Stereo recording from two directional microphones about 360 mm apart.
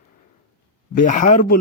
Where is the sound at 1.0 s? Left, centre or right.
Left.